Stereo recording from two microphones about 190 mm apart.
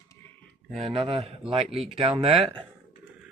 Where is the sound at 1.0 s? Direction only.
30° right (ahead or behind).